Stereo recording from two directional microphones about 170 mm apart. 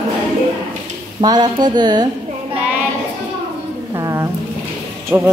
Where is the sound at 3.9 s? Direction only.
15° right (ahead or behind).